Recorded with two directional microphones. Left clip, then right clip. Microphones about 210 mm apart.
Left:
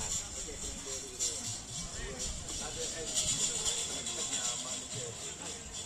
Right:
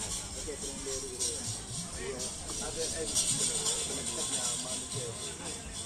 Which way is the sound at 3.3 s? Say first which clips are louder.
Right 1 dB; 5° left (ahead or behind).